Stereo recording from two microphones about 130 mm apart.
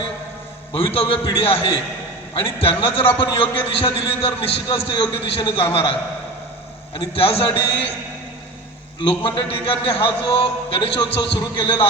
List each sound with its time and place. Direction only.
0.7 s a man's voice: 45° left (ahead or behind)
9.0 s a man's voice: 40° left (ahead or behind)